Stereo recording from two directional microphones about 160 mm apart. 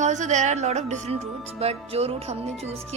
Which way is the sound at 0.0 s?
50° right (ahead or behind).